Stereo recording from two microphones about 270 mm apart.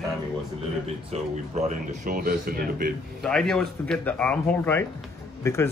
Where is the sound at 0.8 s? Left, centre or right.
Right.